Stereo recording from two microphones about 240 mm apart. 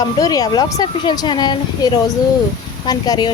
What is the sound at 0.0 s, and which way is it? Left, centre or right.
A woman's voice, centre.